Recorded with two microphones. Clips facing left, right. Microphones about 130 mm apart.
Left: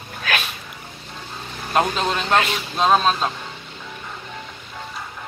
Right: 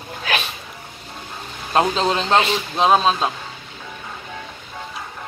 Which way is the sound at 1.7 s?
30° right (ahead or behind).